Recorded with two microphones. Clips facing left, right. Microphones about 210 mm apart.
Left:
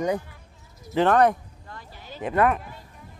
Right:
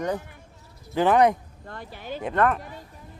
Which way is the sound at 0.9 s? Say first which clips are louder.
Even; 10° right (ahead or behind).